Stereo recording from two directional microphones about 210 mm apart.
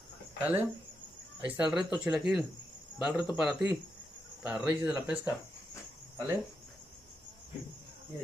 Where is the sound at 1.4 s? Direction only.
5° right (ahead or behind).